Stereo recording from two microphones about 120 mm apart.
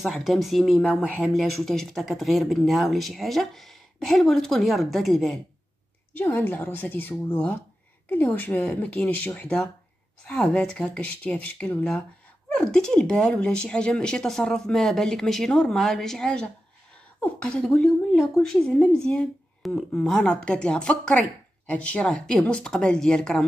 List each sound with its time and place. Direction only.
0.0 s speech: centre (ahead or behind)
0.8 s a woman's voice: 10° left (ahead or behind)
1.2 s speech: centre (ahead or behind)
6.1 s a woman's voice: 15° left (ahead or behind)